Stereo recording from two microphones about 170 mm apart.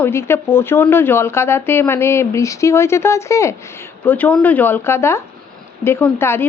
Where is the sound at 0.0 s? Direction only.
15° left (ahead or behind).